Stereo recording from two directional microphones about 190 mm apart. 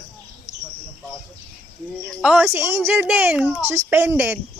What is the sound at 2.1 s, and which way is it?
Speech, centre (ahead or behind).